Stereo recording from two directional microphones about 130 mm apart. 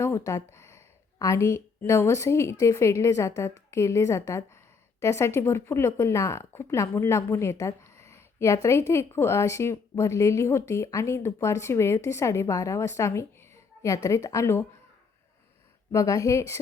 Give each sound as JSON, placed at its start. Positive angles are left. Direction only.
{"t": 0.0, "sound": "speech", "side_deg": 25}
{"t": 15.9, "sound": "speech", "side_deg": 25}